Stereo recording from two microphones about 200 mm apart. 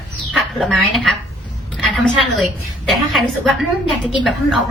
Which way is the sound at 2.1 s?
Centre (ahead or behind).